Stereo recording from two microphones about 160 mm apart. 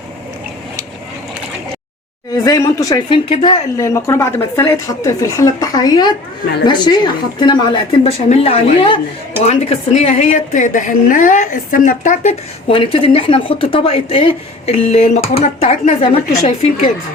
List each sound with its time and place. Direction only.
2.3 s a woman's voice: 20° left (ahead or behind)
3.2 s speech: 35° left (ahead or behind)
3.8 s a woman's voice: 20° left (ahead or behind); by 12.3 s 55° left (ahead or behind)
12.6 s speech: 35° left (ahead or behind)